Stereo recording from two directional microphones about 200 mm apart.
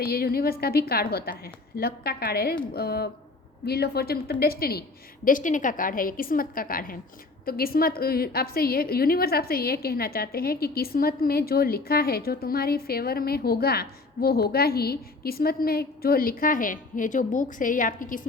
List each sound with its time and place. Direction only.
0.0 s a woman's voice: 50° left (ahead or behind)